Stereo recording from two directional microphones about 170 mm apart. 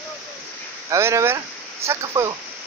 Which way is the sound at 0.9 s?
15° right (ahead or behind).